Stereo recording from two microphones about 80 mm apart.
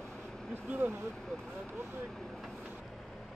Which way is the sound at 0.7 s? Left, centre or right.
Right.